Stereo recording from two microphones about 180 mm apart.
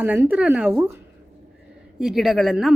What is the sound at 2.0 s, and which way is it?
Speech, centre (ahead or behind).